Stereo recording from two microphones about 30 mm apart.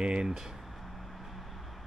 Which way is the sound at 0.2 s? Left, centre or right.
Right.